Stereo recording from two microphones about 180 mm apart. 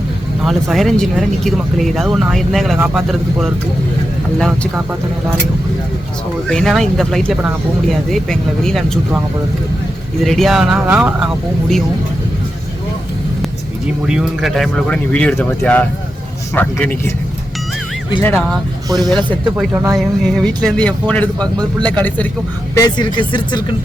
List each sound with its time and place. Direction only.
0.4 s speech: centre (ahead or behind)
4.4 s speech: 5° left (ahead or behind)
6.5 s speech: 5° left (ahead or behind)
10.2 s speech: centre (ahead or behind)
14.1 s speech: centre (ahead or behind)
18.2 s speech: 10° left (ahead or behind)
18.9 s speech: centre (ahead or behind)
19.7 s speech: 15° right (ahead or behind)
20.0 s speech: centre (ahead or behind)
22.7 s speech: 20° left (ahead or behind)